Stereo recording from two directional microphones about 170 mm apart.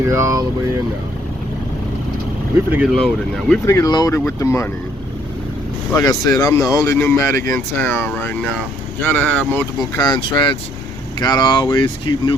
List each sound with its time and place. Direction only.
0.1 s speech: 20° right (ahead or behind)
2.6 s speech: centre (ahead or behind)
3.7 s speech: 20° left (ahead or behind)
5.9 s speech: 20° left (ahead or behind)
10.0 s speech: 30° left (ahead or behind)